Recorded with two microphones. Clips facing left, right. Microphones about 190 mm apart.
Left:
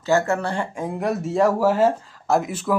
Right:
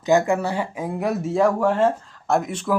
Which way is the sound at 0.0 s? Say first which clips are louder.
Right 2 dB; 15° right (ahead or behind).